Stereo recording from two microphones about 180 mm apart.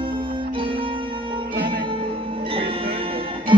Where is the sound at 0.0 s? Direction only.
30° right (ahead or behind).